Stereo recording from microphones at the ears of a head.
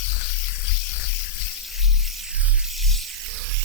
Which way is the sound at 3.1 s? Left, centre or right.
Right.